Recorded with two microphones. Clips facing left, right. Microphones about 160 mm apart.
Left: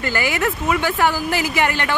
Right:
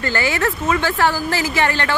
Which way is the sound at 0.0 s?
15° left (ahead or behind).